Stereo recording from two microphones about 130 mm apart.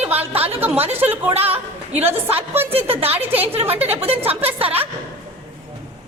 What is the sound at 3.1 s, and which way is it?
Speech, 15° right (ahead or behind).